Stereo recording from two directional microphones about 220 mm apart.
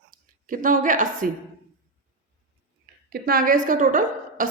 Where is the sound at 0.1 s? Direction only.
40° right (ahead or behind).